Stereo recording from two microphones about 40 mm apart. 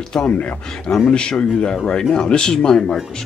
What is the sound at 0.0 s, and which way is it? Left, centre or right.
Speech, centre.